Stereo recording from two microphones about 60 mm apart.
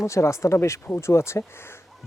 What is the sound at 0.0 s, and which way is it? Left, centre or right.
Speech, left.